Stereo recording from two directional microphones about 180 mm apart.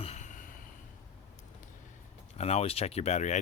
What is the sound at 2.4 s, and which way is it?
Speech, 35° left (ahead or behind).